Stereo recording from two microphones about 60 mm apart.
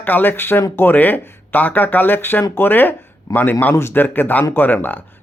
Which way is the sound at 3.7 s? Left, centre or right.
Left.